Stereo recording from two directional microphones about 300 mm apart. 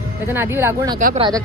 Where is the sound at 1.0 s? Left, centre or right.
Right.